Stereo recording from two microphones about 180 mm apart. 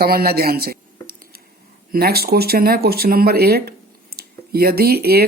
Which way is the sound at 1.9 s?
60° right (ahead or behind).